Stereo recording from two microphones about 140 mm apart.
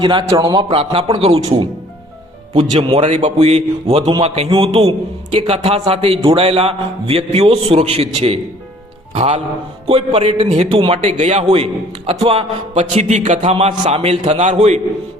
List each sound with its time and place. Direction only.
0.0 s a man's voice: 30° right (ahead or behind)
0.7 s speech: 45° right (ahead or behind)
2.6 s a man's voice: 40° right (ahead or behind)
3.0 s speech: 55° right (ahead or behind)